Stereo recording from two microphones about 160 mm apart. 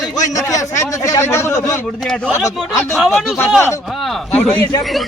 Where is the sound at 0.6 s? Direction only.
20° left (ahead or behind).